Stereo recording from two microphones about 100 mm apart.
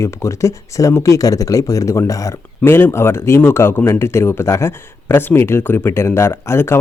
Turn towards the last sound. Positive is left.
turn(degrees=25)  # may be behind; listen again after turning